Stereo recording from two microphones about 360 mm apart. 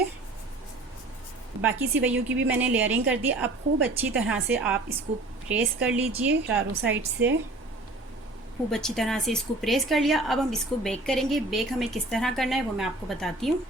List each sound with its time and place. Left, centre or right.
1.6 s a woman's voice: centre
6.6 s a woman's voice: right
8.7 s a woman's voice: centre